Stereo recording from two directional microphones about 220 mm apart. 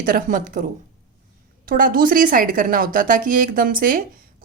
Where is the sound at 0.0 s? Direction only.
40° right (ahead or behind).